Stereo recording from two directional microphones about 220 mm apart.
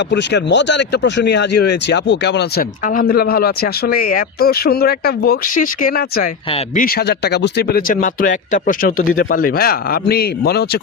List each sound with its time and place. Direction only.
0.1 s speech: 50° left (ahead or behind)